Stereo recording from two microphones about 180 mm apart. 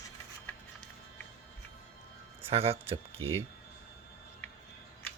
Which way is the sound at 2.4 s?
35° right (ahead or behind).